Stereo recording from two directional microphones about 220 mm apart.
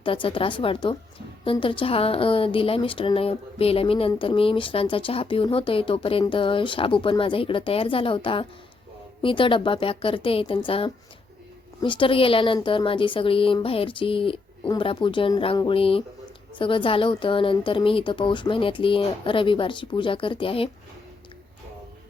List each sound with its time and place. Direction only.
0.0 s a woman's voice: 25° left (ahead or behind)